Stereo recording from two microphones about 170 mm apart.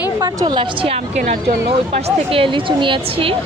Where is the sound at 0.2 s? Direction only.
25° right (ahead or behind).